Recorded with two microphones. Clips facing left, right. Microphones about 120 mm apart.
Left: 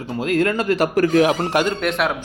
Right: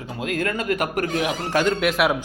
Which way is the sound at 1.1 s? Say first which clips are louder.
Left 8 dB; 55° left (ahead or behind).